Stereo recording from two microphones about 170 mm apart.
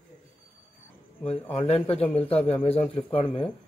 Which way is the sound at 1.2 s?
35° left (ahead or behind).